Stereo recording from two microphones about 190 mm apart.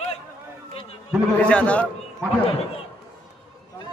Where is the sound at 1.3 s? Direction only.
5° left (ahead or behind).